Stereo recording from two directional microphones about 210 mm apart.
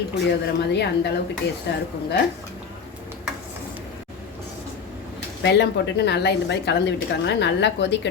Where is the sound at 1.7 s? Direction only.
55° left (ahead or behind).